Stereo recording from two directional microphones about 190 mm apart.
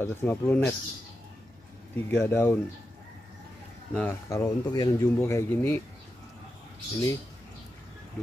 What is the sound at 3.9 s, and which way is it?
Speech, 15° left (ahead or behind).